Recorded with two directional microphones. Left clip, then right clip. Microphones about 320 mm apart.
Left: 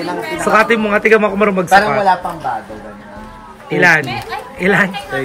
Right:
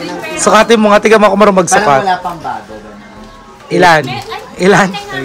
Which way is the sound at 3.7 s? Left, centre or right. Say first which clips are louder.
Right 4 dB; centre.